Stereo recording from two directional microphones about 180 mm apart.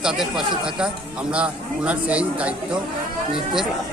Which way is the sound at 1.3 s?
5° right (ahead or behind).